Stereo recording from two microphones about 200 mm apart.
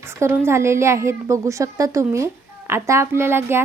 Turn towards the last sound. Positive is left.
turn(degrees=-10)  # may be behind; listen again after turning